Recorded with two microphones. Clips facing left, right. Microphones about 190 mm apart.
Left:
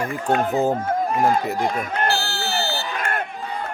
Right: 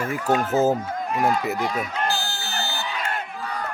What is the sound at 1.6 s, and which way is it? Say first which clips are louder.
Speech: left 3 dB; 55° left (ahead or behind).